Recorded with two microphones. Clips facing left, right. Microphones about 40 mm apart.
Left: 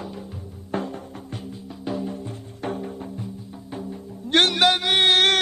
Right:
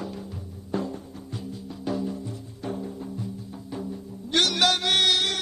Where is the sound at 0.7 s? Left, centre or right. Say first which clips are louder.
Left 2 dB; left.